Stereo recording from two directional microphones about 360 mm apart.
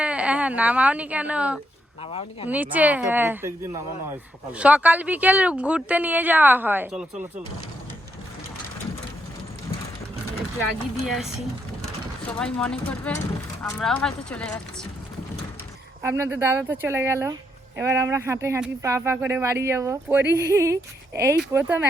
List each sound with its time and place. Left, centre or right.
0.0 s a woman's voice: centre
2.0 s speech: centre
2.5 s speech: centre
12.3 s speech: centre
16.0 s speech: centre